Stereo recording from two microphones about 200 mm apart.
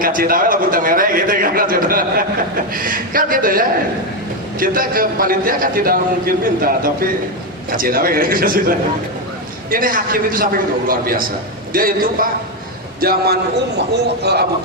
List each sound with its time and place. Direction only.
0.0 s a man's voice: 45° right (ahead or behind)